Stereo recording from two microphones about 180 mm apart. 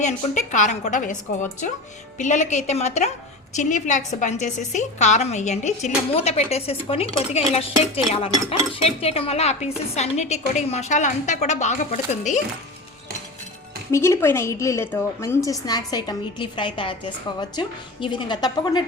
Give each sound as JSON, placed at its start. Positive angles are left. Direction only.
{"t": 0.0, "sound": "a woman's voice", "side_deg": 40}
{"t": 13.9, "sound": "a woman's voice", "side_deg": 15}